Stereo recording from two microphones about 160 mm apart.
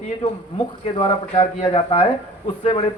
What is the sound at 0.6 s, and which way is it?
Speech, 35° left (ahead or behind).